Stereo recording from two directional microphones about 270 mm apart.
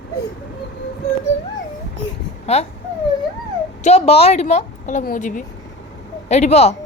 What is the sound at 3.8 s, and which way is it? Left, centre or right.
A woman's voice, left.